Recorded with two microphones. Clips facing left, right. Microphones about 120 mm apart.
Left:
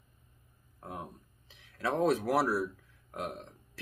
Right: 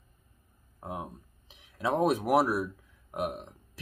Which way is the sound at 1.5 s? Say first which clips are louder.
Right 3 dB; 15° right (ahead or behind).